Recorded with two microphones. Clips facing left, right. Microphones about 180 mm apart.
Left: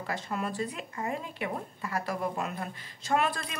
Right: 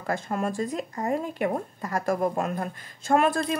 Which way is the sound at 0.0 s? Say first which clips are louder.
Right 6 dB; 45° right (ahead or behind).